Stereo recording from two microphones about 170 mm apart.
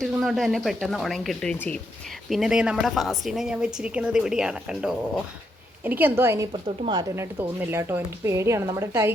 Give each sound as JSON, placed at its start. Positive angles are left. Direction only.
{"t": 0.0, "sound": "a woman's voice", "side_deg": 0}
{"t": 6.5, "sound": "a woman's voice", "side_deg": -30}
{"t": 7.2, "sound": "a woman's voice", "side_deg": -15}